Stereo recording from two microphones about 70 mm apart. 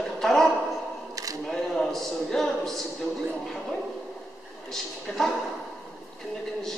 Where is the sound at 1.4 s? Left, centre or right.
Centre.